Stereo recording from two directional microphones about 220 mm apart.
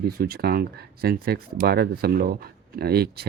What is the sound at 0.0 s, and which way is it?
Speech, 45° right (ahead or behind).